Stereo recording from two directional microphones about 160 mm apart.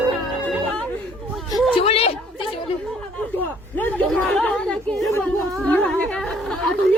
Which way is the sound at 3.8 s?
10° left (ahead or behind).